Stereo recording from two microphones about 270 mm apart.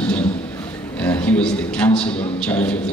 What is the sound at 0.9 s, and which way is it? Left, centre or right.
A man's voice, centre.